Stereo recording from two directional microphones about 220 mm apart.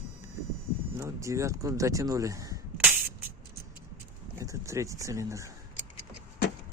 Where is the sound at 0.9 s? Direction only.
15° right (ahead or behind).